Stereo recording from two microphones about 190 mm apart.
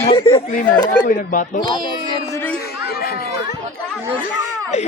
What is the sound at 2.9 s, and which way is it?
Run, 55° left (ahead or behind).